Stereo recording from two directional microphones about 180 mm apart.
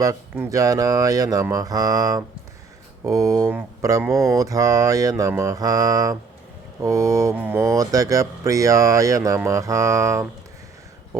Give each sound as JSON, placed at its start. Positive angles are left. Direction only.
{"t": 0.0, "sound": "speech", "side_deg": -20}